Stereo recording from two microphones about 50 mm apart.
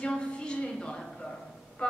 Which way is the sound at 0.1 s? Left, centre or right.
Centre.